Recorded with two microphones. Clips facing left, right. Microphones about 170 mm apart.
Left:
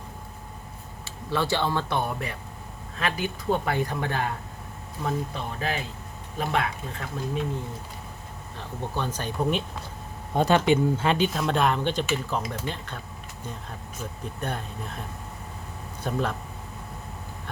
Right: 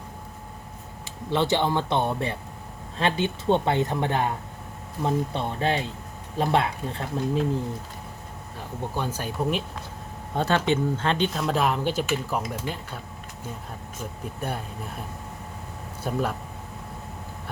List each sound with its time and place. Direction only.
1.3 s speech: 20° right (ahead or behind)
5.0 s speech: 30° right (ahead or behind)
8.5 s speech: 10° right (ahead or behind)
10.3 s speech: 15° left (ahead or behind); by 13.0 s 10° right (ahead or behind)
14.4 s speech: 5° right (ahead or behind)
16.1 s speech: 5° right (ahead or behind)